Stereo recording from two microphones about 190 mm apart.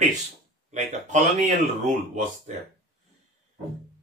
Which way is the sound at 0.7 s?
40° right (ahead or behind).